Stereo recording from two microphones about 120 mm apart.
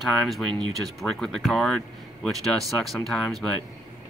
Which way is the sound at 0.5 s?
40° right (ahead or behind).